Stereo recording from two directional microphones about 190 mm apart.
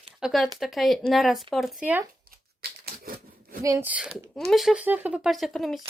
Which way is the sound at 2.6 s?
50° right (ahead or behind).